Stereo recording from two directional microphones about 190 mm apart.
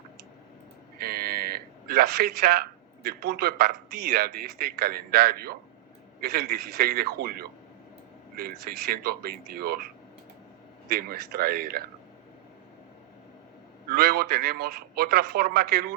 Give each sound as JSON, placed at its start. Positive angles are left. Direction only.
{"t": 0.9, "sound": "speech", "side_deg": -50}
{"t": 10.8, "sound": "speech", "side_deg": -50}
{"t": 13.9, "sound": "speech", "side_deg": -55}